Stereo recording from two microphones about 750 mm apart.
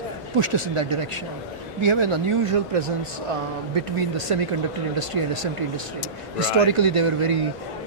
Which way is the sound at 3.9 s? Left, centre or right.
Right.